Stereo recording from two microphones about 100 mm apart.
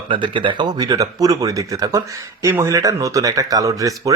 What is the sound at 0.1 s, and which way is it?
Speech, 55° right (ahead or behind).